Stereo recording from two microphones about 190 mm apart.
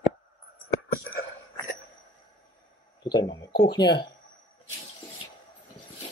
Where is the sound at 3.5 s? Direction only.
55° left (ahead or behind).